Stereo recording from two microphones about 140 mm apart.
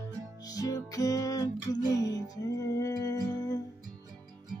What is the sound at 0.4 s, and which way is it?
Music, 25° left (ahead or behind).